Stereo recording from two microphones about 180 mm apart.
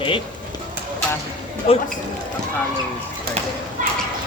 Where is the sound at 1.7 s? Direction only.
30° left (ahead or behind).